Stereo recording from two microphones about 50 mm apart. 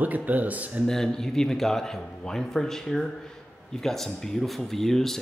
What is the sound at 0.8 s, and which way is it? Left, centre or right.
Speech, centre.